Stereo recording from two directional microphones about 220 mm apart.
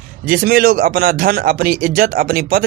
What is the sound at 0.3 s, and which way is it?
Speech, 40° right (ahead or behind).